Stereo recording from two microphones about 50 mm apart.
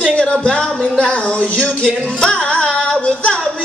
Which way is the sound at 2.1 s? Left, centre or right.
Centre.